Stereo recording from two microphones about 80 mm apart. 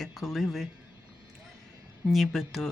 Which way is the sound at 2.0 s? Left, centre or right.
Centre.